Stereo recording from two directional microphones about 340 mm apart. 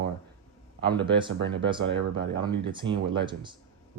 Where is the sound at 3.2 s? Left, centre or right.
Centre.